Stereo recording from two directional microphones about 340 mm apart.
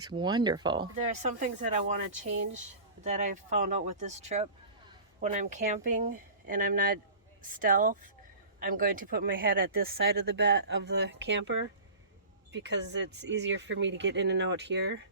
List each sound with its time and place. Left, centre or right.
0.1 s speech: centre; by 15.0 s right